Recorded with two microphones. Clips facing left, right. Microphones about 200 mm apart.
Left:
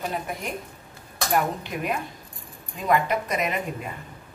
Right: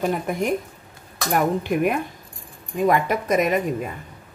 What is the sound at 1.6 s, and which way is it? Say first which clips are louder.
Speech: right 8 dB; 55° right (ahead or behind).